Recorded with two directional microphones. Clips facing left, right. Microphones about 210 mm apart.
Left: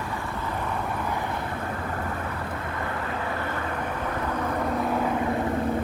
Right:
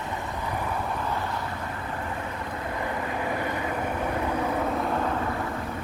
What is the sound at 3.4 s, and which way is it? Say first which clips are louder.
Vehicle: right 1 dB; 15° right (ahead or behind).